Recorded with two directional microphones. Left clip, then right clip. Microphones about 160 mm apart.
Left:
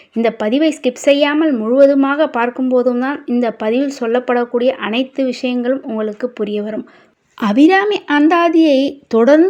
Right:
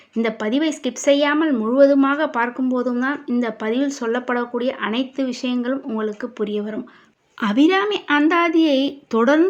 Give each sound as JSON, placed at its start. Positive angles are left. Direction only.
{"t": 0.2, "sound": "speech", "side_deg": 25}